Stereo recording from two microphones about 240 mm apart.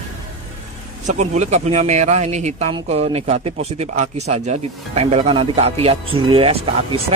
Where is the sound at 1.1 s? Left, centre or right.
Right.